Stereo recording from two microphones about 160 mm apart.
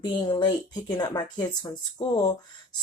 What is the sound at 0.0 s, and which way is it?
Speech, 30° left (ahead or behind).